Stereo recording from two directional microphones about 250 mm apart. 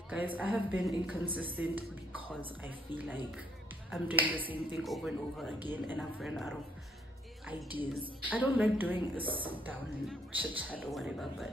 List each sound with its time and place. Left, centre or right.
0.1 s a woman's voice: centre